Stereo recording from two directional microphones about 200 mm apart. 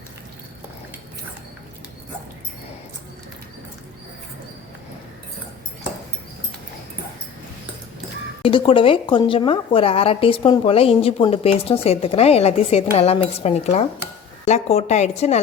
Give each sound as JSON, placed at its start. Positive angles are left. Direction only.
{"t": 8.4, "sound": "a woman's voice", "side_deg": 25}